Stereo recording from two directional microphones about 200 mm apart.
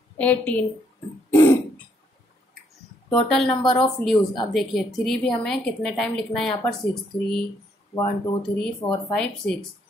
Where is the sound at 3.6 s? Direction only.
25° left (ahead or behind).